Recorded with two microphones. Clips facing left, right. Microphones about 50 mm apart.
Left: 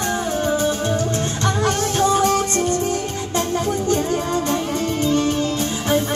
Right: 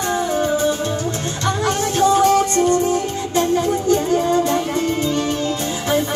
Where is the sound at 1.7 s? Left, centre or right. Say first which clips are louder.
Right 3 dB; centre.